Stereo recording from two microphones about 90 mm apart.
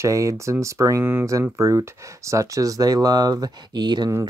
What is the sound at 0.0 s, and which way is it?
Speech, 35° right (ahead or behind).